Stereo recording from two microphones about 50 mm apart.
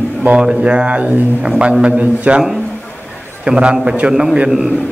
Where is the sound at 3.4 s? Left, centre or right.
Centre.